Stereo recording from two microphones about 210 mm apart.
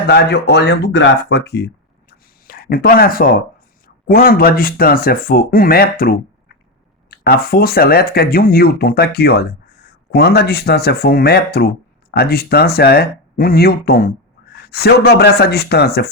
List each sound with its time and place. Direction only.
0.1 s speech: 50° left (ahead or behind)